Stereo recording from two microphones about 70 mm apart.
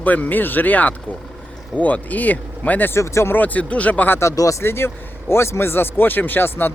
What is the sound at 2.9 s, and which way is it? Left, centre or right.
Speech, left.